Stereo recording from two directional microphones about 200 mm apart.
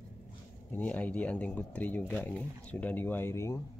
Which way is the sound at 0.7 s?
10° left (ahead or behind).